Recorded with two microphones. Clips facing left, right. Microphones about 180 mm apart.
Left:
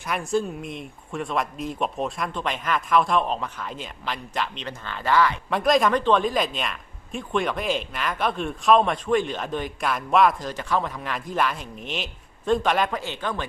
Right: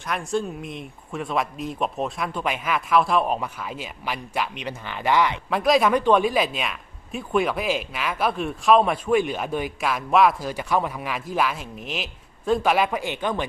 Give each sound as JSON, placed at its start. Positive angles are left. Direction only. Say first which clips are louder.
{"t": 0.0, "sound": "speech", "louder": "left 1 dB", "side_deg": 0}
{"t": 5.5, "sound": "speech", "louder": "right 3 dB", "side_deg": 0}